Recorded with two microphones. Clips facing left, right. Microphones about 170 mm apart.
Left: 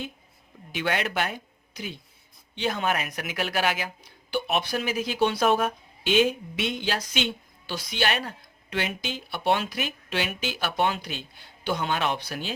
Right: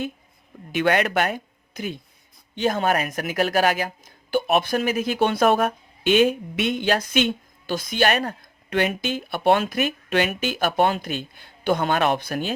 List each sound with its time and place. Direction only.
0.7 s a woman's voice: 55° right (ahead or behind)